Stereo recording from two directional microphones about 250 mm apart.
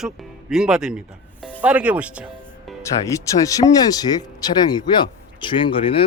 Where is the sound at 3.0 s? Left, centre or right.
Centre.